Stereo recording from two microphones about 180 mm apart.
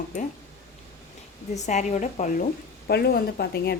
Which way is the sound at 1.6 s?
40° left (ahead or behind).